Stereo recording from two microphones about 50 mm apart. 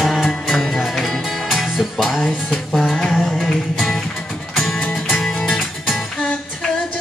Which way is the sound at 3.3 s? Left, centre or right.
Centre.